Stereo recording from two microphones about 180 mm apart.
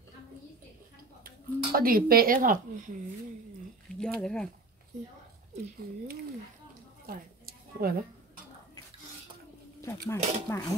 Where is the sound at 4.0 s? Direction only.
5° left (ahead or behind).